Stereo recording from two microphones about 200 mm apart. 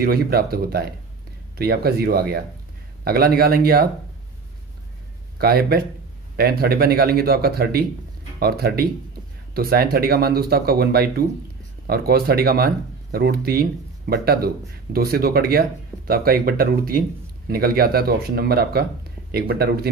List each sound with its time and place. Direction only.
0.0 s speech: 50° right (ahead or behind)
5.4 s speech: 50° right (ahead or behind)